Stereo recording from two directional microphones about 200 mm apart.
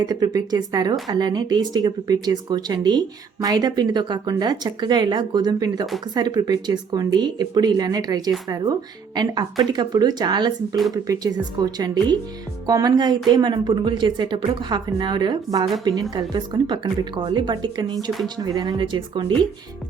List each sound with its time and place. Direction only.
0.0 s a woman's voice: 20° right (ahead or behind)